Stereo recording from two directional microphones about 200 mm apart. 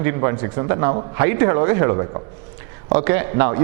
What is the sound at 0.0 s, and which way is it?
Speech, 15° right (ahead or behind).